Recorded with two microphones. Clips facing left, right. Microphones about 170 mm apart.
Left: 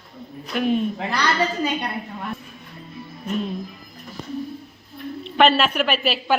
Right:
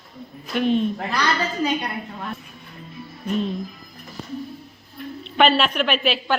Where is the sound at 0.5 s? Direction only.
5° left (ahead or behind).